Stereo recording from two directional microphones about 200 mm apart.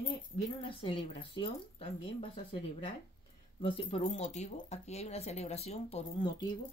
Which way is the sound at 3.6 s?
25° left (ahead or behind).